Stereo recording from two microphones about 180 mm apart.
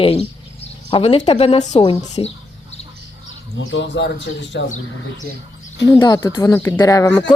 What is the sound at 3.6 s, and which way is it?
Speech, 90° left.